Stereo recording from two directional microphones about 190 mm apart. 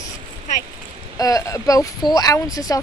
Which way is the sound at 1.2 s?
20° left (ahead or behind).